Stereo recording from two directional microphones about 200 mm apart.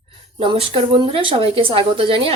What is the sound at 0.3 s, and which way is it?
Speech, 30° right (ahead or behind).